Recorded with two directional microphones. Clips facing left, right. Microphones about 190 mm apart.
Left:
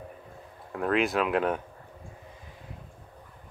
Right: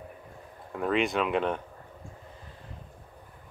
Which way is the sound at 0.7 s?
Centre (ahead or behind).